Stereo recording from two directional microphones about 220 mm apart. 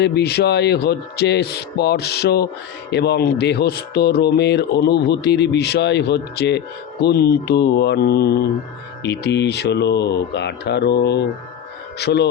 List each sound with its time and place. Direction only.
0.0 s speech: 50° left (ahead or behind)